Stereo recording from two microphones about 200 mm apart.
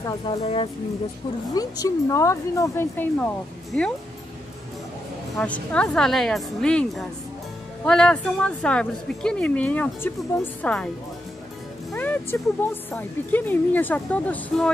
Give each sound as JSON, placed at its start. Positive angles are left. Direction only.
{"t": 0.4, "sound": "speech", "side_deg": 30}
{"t": 1.5, "sound": "speech", "side_deg": 20}
{"t": 5.4, "sound": "speech", "side_deg": 5}
{"t": 11.9, "sound": "speech", "side_deg": 10}